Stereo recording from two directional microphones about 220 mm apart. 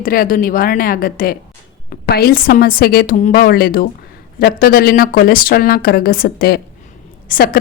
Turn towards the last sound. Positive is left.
turn(degrees=40)  # may be behind; listen again after turning